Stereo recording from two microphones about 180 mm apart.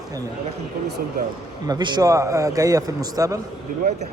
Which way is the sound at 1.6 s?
25° right (ahead or behind).